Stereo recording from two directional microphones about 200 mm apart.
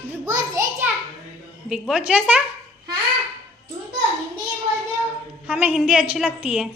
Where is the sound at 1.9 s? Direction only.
5° right (ahead or behind).